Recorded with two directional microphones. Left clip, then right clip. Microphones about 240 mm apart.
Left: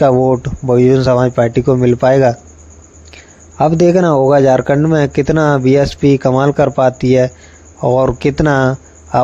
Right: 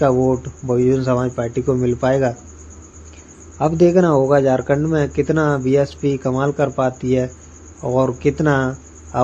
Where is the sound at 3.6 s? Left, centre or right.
Left.